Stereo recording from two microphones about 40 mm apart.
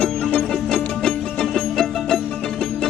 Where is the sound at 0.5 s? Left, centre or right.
Centre.